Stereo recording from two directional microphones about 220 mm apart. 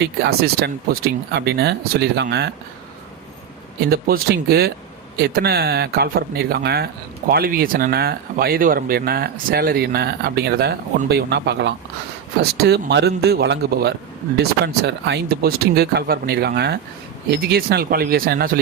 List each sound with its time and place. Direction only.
0.0 s speech: 45° right (ahead or behind)
3.8 s speech: 45° right (ahead or behind)